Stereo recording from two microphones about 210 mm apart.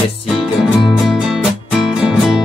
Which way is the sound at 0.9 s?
Centre (ahead or behind).